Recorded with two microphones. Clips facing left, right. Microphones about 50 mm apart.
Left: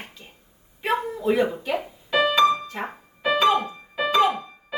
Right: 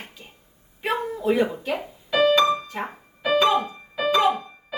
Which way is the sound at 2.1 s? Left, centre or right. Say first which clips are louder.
Right 1 dB; centre.